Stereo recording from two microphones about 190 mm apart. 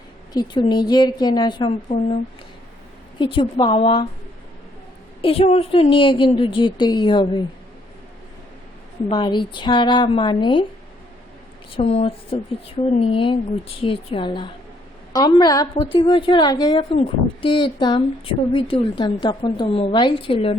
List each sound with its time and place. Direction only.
0.3 s a woman's voice: 20° left (ahead or behind)
3.2 s a woman's voice: 25° left (ahead or behind)
5.2 s a woman's voice: 30° left (ahead or behind)
9.0 s a woman's voice: 25° left (ahead or behind)
11.7 s a woman's voice: 30° left (ahead or behind)
15.8 s a woman's voice: 30° left (ahead or behind)